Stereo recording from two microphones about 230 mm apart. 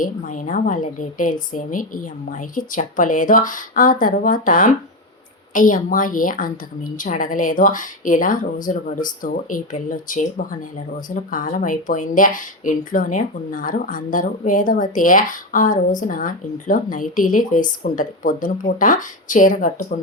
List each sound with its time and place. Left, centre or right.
0.0 s speech: left